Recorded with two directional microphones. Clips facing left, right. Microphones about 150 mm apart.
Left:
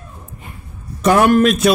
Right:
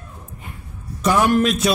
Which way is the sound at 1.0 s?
60° left (ahead or behind).